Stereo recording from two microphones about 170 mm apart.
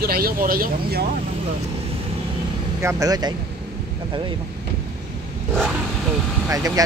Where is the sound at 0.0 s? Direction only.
60° right (ahead or behind).